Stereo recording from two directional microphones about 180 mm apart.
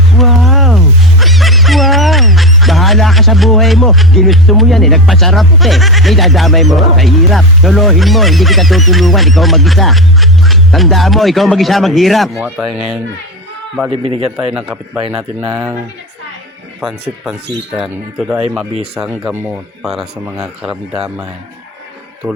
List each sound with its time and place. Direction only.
0.1 s speech: centre (ahead or behind)
13.9 s speech: 30° right (ahead or behind)
14.3 s speech: 5° right (ahead or behind)
15.1 s speech: 15° right (ahead or behind)
17.7 s speech: 5° right (ahead or behind)